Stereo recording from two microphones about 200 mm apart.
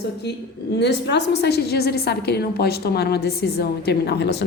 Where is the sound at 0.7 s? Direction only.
60° left (ahead or behind).